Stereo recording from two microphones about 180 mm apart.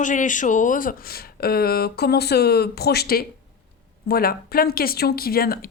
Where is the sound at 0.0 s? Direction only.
45° left (ahead or behind).